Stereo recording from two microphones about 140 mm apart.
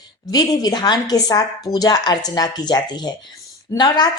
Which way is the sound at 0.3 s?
30° left (ahead or behind).